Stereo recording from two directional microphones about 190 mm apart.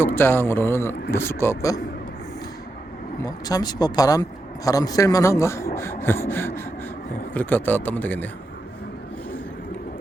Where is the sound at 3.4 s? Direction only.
20° left (ahead or behind).